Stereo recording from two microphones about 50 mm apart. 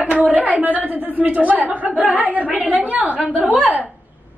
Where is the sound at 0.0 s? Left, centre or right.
Right.